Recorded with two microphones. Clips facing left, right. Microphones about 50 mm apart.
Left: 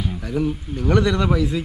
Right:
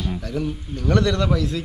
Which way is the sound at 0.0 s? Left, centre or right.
Centre.